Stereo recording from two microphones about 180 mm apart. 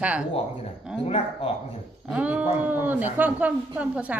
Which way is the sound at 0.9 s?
35° left (ahead or behind).